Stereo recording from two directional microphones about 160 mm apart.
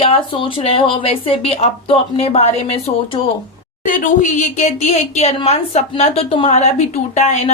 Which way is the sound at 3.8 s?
55° left (ahead or behind).